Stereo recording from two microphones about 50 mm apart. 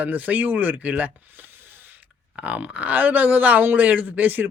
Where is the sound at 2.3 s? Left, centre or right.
Right.